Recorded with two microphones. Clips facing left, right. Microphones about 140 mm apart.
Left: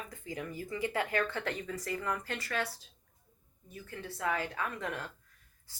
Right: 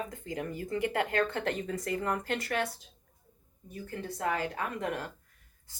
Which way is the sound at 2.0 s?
55° right (ahead or behind).